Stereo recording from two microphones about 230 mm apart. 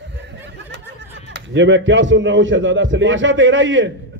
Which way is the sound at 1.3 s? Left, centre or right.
Right.